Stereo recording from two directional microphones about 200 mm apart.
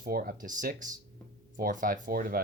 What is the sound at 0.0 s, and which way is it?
Speech, 45° right (ahead or behind).